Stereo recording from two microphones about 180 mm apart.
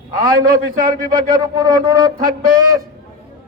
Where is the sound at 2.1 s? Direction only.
50° right (ahead or behind).